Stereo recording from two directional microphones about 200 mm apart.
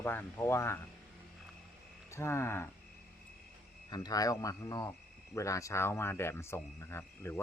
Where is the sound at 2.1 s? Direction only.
15° left (ahead or behind).